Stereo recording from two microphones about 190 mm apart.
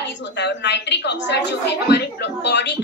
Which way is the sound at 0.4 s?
65° left (ahead or behind).